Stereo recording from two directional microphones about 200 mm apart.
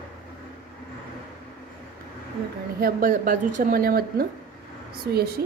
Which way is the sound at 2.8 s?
45° right (ahead or behind).